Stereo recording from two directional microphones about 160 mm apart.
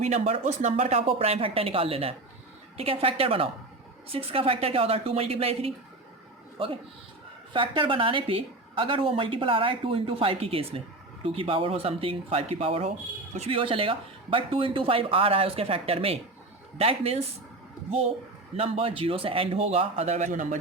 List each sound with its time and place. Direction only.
0.0 s a woman's voice: 40° right (ahead or behind)
18.5 s a woman's voice: 35° right (ahead or behind)